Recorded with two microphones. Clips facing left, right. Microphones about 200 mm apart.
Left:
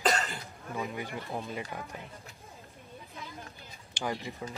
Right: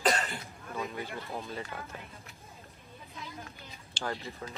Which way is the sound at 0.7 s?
15° left (ahead or behind).